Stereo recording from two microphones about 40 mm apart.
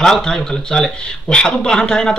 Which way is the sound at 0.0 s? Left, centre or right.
Centre.